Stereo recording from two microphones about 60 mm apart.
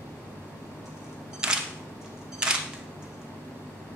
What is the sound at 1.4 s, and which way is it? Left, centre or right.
Single-lens reflex camera, centre.